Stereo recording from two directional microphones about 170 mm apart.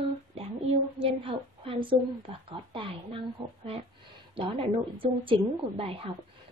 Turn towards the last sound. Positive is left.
turn(degrees=-35)  # may be behind; listen again after turning